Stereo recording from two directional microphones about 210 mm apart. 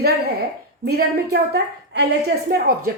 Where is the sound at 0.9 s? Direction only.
45° right (ahead or behind).